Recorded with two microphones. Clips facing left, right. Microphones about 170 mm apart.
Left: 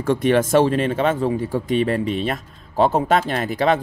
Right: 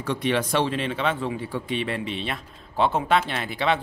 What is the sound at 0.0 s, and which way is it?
Speech, 45° left (ahead or behind).